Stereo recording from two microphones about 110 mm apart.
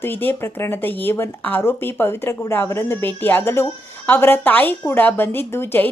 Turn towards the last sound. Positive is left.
turn(degrees=20)  # may be behind; listen again after turning